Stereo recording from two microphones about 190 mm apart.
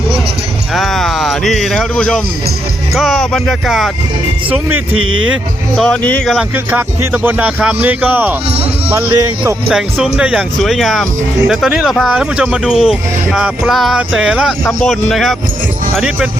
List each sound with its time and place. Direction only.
0.7 s speech: centre (ahead or behind)
4.9 s speech: 90° right
5.7 s speech: 5° left (ahead or behind)
6.7 s speech: 10° right (ahead or behind)